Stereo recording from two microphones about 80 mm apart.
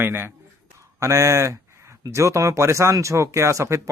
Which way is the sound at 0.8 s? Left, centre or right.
Right.